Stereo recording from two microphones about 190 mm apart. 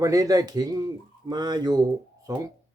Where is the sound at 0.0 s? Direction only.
20° right (ahead or behind).